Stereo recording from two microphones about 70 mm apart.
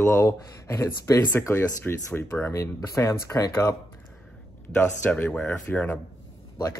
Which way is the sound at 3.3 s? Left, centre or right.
Left.